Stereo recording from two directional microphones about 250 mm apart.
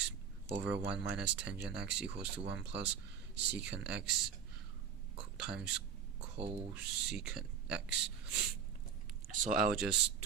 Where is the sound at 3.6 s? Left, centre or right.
Centre.